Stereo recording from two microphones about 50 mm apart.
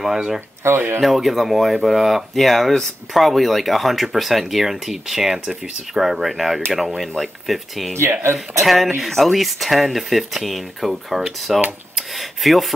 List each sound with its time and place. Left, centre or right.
0.0 s speech: centre
0.7 s speech: right
1.0 s speech: centre
8.0 s speech: right
8.6 s speech: centre